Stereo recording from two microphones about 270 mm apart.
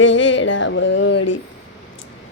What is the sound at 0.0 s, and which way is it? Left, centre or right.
Music, left.